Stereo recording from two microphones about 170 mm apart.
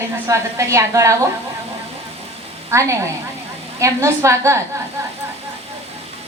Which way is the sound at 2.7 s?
15° right (ahead or behind).